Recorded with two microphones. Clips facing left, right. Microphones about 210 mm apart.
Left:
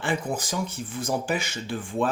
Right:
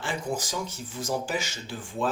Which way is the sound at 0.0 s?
55° left (ahead or behind).